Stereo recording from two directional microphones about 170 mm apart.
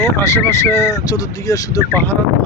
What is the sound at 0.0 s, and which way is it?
Speech, 15° left (ahead or behind).